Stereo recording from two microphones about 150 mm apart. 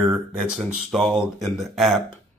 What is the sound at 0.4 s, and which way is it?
Speech, centre (ahead or behind).